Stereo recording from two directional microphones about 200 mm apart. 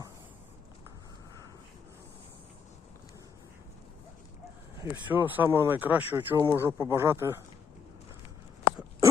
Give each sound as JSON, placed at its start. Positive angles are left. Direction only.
{"t": 4.8, "sound": "speech", "side_deg": -10}
{"t": 6.3, "sound": "speech", "side_deg": -20}